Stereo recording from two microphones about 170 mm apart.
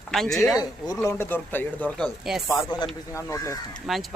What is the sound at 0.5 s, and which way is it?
Speech, 20° left (ahead or behind).